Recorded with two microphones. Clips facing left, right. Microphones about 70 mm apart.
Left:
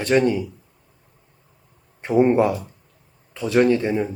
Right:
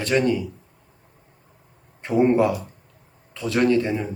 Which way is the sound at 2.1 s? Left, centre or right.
Centre.